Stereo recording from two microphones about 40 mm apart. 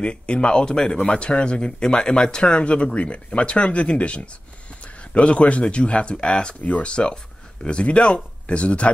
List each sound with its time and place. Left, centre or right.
0.0 s speech: left